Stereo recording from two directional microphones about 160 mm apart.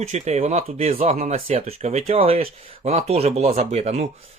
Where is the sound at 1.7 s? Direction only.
45° right (ahead or behind).